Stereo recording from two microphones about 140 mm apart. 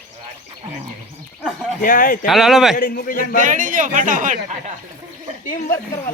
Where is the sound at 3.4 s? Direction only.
70° right (ahead or behind).